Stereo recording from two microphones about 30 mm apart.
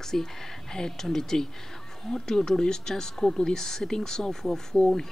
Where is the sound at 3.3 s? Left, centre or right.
Left.